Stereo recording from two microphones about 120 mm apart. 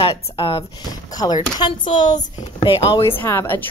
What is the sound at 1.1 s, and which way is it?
Speech, 35° left (ahead or behind).